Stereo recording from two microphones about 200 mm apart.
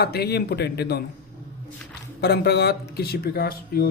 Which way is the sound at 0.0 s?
55° left (ahead or behind).